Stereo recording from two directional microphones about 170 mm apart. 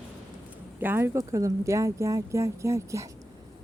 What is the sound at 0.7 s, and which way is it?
Speech, 10° right (ahead or behind).